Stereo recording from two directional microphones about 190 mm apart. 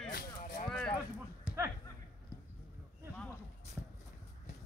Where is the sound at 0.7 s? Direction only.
5° left (ahead or behind).